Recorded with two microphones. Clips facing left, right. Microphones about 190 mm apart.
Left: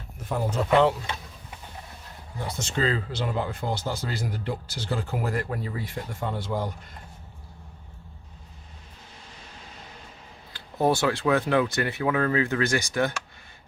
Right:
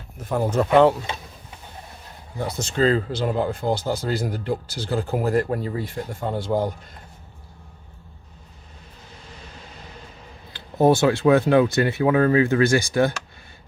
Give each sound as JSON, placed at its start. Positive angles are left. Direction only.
{"t": 0.3, "sound": "speech", "side_deg": -50}
{"t": 2.6, "sound": "speech", "side_deg": -40}
{"t": 10.5, "sound": "speech", "side_deg": -25}